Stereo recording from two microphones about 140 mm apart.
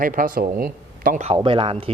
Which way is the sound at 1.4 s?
40° right (ahead or behind).